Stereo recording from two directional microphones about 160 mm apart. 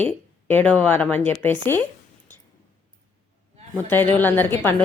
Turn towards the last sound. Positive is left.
turn(degrees=10)  # may be behind; listen again after turning